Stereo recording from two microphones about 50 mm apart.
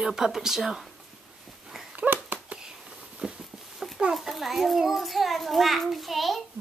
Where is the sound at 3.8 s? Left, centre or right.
Centre.